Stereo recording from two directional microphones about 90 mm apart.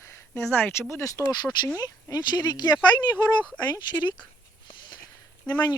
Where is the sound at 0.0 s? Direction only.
35° left (ahead or behind).